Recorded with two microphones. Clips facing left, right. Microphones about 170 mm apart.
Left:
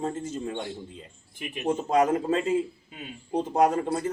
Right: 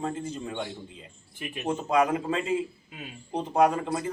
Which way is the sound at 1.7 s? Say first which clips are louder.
Left 2 dB; 45° left (ahead or behind).